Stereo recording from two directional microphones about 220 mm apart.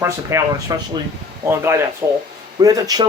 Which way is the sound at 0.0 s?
10° right (ahead or behind).